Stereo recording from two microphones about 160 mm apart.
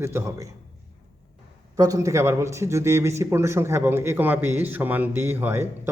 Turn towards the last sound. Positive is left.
turn(degrees=-15)  # may be behind; listen again after turning